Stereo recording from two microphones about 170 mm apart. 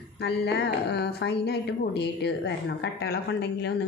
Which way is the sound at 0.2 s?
75° left (ahead or behind).